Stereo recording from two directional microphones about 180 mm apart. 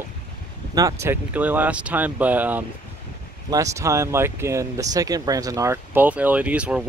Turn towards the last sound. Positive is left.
turn(degrees=-5)  # may be behind; listen again after turning